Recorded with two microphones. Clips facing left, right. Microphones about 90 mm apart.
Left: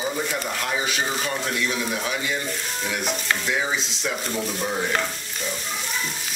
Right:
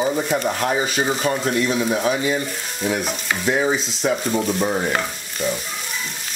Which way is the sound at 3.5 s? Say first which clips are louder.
Right 6 dB; 40° right (ahead or behind).